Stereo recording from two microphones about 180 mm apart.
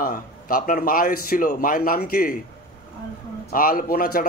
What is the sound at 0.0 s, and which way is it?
A man's voice, 50° left (ahead or behind).